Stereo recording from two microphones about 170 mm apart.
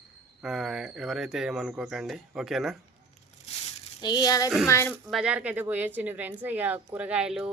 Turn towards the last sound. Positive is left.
turn(degrees=-5)  # may be behind; listen again after turning